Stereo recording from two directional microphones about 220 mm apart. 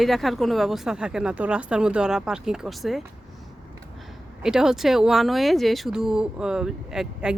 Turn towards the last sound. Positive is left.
turn(degrees=-5)  # may be behind; listen again after turning